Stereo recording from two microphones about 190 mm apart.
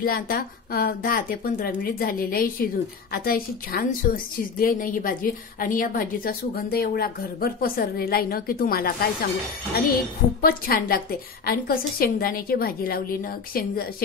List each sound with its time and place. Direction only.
0.0 s a woman's voice: 50° left (ahead or behind)
10.4 s a woman's voice: 50° left (ahead or behind)